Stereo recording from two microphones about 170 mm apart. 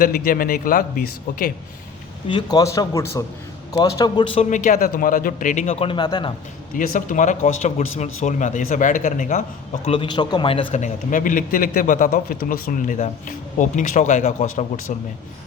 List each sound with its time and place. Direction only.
0.0 s a man's voice: 60° left (ahead or behind)
2.2 s a man's voice: 25° left (ahead or behind)
4.4 s a man's voice: 45° left (ahead or behind)
5.8 s a man's voice: 30° left (ahead or behind)
6.7 s a man's voice: 50° left (ahead or behind)
9.8 s a man's voice: 35° left (ahead or behind)
10.7 s a man's voice: 45° left (ahead or behind)